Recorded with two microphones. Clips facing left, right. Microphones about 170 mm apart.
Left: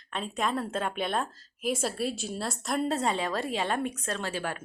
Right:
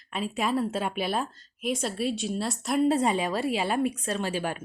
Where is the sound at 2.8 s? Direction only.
10° right (ahead or behind).